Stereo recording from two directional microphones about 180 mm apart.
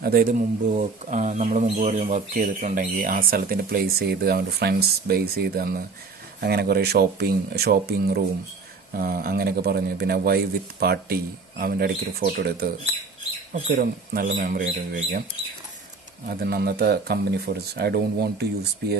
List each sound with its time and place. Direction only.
0.0 s speech: 55° right (ahead or behind)
16.3 s speech: 60° right (ahead or behind)